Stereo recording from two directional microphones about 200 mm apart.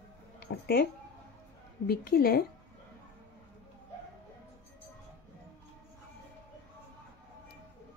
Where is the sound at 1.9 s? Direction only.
50° left (ahead or behind).